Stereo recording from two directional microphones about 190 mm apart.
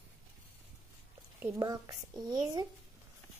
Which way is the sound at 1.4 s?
20° right (ahead or behind).